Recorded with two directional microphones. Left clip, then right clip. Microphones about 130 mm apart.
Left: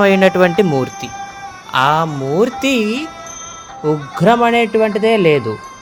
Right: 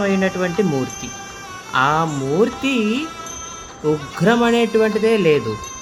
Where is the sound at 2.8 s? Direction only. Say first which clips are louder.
Left 3 dB; 40° left (ahead or behind).